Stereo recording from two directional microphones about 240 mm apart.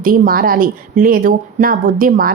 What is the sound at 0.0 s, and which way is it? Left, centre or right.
A woman's voice, right.